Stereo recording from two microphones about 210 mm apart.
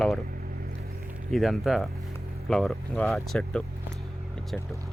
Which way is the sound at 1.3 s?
Centre (ahead or behind).